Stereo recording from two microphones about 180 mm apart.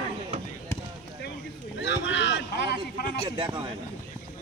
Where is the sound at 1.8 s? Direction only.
85° left.